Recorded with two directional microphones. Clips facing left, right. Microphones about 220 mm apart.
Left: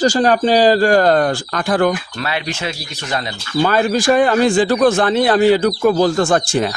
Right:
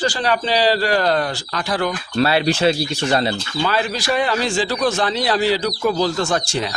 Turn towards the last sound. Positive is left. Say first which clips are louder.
# left 6 dB
turn(degrees=50)  # may be behind; listen again after turning